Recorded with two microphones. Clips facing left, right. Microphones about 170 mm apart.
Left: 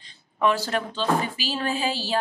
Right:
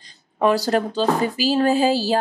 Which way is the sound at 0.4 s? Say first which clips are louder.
Right 5 dB; 40° right (ahead or behind).